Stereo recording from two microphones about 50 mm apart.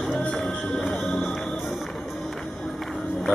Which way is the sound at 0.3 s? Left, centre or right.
Centre.